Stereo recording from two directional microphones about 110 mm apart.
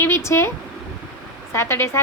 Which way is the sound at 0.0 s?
25° left (ahead or behind).